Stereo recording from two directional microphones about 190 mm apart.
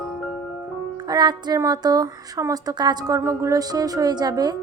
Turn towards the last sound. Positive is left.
turn(degrees=-20)  # may be behind; listen again after turning